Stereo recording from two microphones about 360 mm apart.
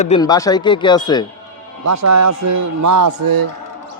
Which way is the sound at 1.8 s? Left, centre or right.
Right.